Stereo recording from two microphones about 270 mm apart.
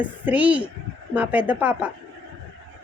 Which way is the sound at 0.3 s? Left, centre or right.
Centre.